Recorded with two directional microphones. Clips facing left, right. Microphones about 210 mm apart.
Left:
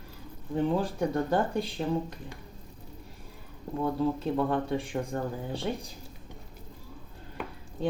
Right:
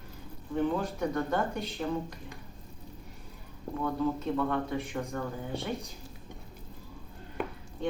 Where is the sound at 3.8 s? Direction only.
30° left (ahead or behind).